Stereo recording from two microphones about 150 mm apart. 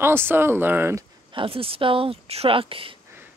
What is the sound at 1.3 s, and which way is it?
Speech, 40° right (ahead or behind).